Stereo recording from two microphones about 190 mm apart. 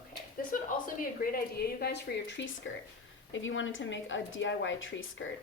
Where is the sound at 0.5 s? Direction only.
45° left (ahead or behind).